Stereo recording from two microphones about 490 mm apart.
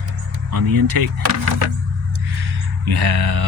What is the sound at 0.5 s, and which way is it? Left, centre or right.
Speech, right.